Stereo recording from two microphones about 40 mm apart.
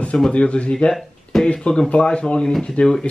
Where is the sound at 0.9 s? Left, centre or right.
Centre.